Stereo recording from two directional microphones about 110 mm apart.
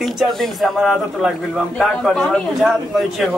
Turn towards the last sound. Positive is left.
turn(degrees=0)  # may be behind; listen again after turning